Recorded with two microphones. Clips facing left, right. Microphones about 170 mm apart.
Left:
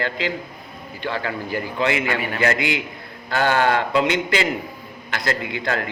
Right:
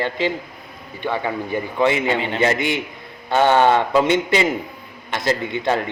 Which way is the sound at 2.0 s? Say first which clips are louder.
Right 3 dB; 25° right (ahead or behind).